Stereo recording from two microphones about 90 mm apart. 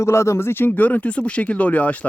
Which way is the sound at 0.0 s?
30° left (ahead or behind).